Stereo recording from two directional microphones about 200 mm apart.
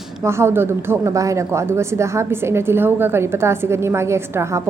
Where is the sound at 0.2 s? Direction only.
15° right (ahead or behind).